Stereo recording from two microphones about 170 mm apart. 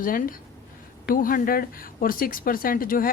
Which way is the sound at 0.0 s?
55° left (ahead or behind).